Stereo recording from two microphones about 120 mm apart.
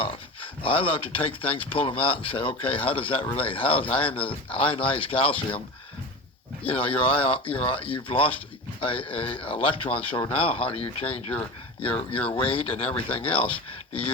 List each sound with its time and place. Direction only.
0.6 s speech: 50° left (ahead or behind)
6.7 s speech: 50° left (ahead or behind)